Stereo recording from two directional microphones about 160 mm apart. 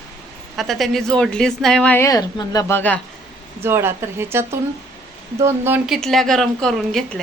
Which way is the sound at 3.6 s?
15° right (ahead or behind).